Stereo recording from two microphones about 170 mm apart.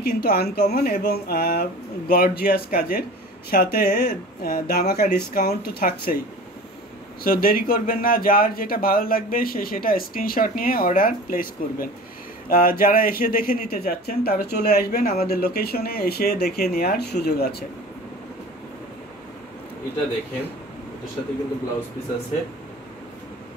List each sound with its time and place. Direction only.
0.0 s speech: 65° left (ahead or behind)
7.2 s speech: 60° left (ahead or behind)